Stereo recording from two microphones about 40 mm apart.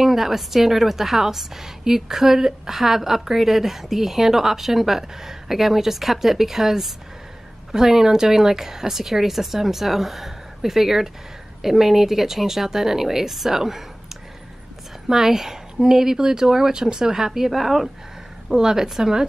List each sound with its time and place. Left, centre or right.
0.0 s a woman's voice: centre